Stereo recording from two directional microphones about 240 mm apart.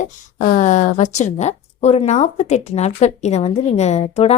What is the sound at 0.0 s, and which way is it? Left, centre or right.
Speech, left.